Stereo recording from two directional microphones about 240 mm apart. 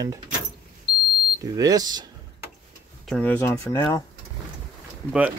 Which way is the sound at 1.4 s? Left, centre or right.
Centre.